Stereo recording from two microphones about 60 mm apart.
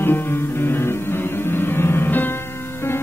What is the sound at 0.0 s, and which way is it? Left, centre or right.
Music, left.